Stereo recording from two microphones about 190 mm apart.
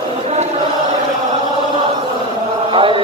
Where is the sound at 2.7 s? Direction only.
25° right (ahead or behind).